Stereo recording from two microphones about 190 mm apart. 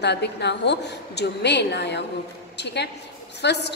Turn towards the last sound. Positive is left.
turn(degrees=65)  # may be behind; listen again after turning